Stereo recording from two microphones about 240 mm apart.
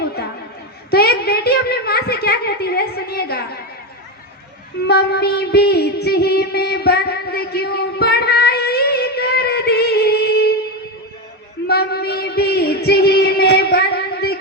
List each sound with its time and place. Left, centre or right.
0.0 s a sound: left
4.9 s music: left
11.6 s female singing: left